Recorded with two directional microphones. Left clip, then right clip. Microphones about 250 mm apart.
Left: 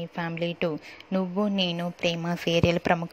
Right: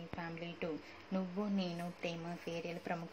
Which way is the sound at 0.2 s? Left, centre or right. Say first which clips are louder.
Left 16 dB; left.